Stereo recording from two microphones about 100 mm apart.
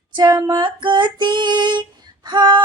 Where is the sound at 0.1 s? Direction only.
45° right (ahead or behind).